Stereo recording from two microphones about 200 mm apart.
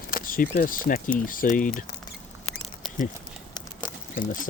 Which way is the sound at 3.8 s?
40° left (ahead or behind).